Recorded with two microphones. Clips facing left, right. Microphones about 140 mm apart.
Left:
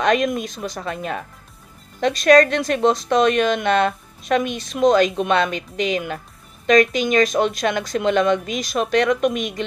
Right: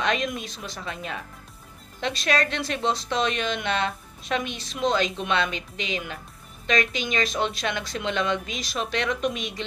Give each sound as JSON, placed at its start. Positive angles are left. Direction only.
{"t": 0.0, "sound": "speech", "side_deg": 45}